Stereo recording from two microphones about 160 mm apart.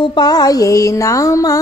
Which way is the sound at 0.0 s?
25° left (ahead or behind).